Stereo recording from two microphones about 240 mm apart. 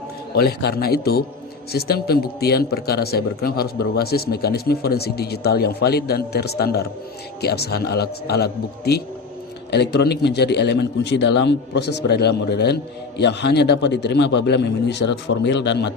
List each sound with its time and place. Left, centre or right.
0.3 s a man's voice: left